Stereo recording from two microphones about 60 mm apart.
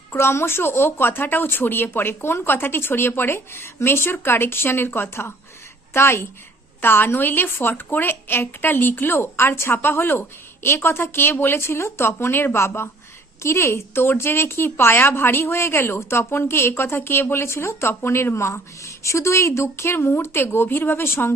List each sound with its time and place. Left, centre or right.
0.1 s a woman's voice: left